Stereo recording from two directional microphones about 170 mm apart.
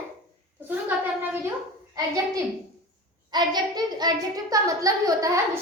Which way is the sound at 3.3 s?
25° right (ahead or behind).